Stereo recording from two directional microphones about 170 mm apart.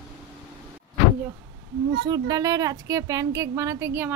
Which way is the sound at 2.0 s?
25° right (ahead or behind).